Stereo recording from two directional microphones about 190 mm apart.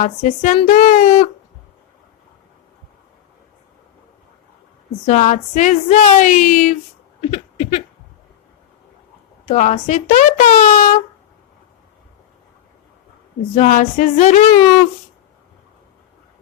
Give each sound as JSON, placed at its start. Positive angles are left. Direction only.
{"t": 0.0, "sound": "speech", "side_deg": 40}
{"t": 5.0, "sound": "speech", "side_deg": 40}
{"t": 7.2, "sound": "a sound", "side_deg": 30}
{"t": 9.5, "sound": "speech", "side_deg": 40}
{"t": 13.6, "sound": "speech", "side_deg": 40}